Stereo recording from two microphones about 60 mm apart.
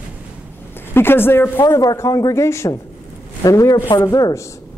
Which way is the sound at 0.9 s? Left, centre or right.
Left.